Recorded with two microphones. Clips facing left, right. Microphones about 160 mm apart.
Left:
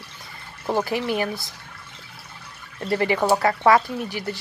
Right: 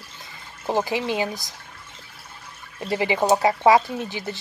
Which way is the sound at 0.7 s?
20° right (ahead or behind).